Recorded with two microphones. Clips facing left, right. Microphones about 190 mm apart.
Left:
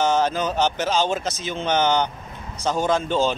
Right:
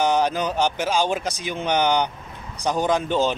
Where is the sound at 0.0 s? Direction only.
15° right (ahead or behind).